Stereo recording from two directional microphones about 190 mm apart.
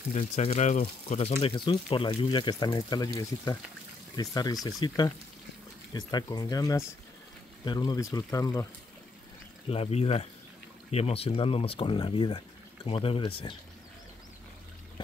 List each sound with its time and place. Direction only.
0.1 s speech: 35° left (ahead or behind); by 3.1 s 20° left (ahead or behind)
4.2 s speech: 20° left (ahead or behind)
9.7 s speech: 30° left (ahead or behind)